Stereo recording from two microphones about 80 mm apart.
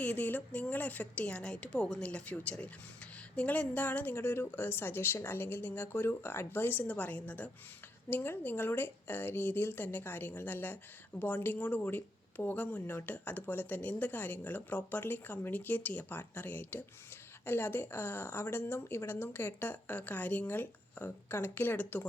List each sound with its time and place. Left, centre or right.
0.0 s a woman's voice: centre